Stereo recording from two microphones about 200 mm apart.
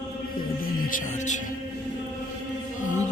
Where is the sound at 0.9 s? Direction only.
35° left (ahead or behind).